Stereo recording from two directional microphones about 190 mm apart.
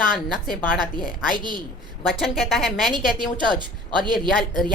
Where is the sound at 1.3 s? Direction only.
25° right (ahead or behind).